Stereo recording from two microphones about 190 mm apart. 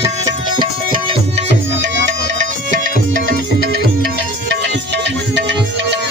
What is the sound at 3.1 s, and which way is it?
Music, 45° right (ahead or behind).